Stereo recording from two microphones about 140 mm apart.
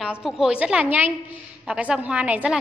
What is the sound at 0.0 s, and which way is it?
A child's voice, centre (ahead or behind).